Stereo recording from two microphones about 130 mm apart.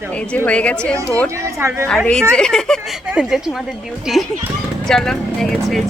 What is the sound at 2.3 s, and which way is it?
Speech, 5° left (ahead or behind).